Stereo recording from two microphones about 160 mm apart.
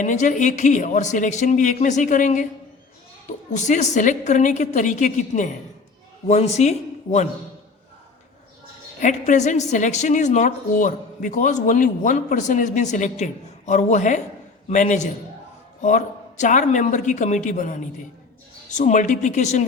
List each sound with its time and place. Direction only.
0.0 s a woman's voice: 50° left (ahead or behind)
3.5 s a woman's voice: 50° left (ahead or behind)
9.0 s a woman's voice: 50° left (ahead or behind)